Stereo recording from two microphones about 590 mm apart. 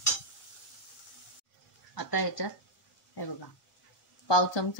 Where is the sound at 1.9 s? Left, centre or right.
Left.